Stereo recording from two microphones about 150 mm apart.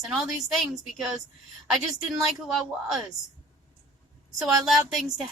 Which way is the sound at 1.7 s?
Centre (ahead or behind).